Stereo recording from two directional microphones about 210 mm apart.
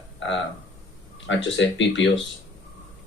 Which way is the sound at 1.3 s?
60° left (ahead or behind).